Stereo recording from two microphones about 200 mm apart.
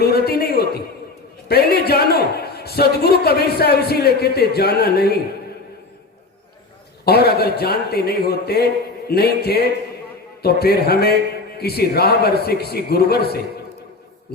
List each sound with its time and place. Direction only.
0.0 s a sound: 50° left (ahead or behind)
1.5 s a man's voice: 50° left (ahead or behind)
7.0 s a man's voice: 50° left (ahead or behind)